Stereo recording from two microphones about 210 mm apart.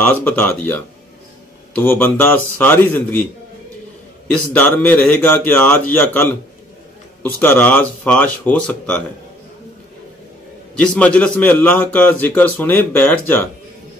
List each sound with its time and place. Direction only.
0.0 s a man's voice: 10° left (ahead or behind)
4.3 s a man's voice: 5° left (ahead or behind)
10.8 s a man's voice: 5° left (ahead or behind)